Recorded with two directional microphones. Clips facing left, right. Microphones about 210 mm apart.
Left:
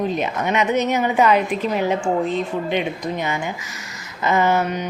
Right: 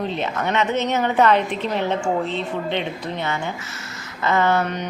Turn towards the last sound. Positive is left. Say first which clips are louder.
# left 1 dB
turn(degrees=15)  # may be behind; listen again after turning